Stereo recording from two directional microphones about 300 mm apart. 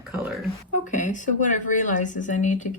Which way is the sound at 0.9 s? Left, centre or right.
Left.